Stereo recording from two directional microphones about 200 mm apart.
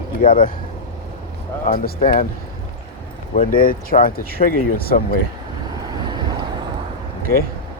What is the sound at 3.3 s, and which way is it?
Speech, 45° left (ahead or behind).